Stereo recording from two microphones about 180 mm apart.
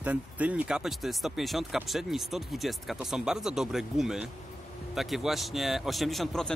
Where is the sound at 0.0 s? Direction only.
10° right (ahead or behind).